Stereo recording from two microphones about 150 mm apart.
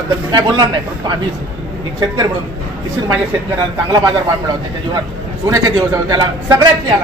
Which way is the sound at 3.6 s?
25° right (ahead or behind).